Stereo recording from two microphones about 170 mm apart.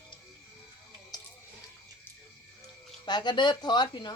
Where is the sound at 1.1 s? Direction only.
25° left (ahead or behind).